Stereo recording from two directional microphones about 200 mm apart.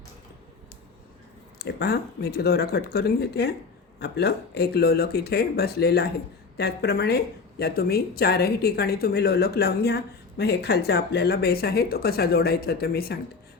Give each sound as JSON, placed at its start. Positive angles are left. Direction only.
{"t": 1.5, "sound": "a woman's voice", "side_deg": 55}